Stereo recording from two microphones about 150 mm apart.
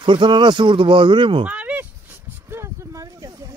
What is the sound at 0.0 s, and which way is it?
Speech, 30° right (ahead or behind).